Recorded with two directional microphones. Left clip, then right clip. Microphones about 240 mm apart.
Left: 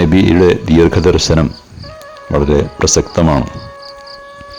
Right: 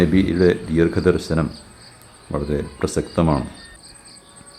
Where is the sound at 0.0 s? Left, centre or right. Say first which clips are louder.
Left 7 dB; left.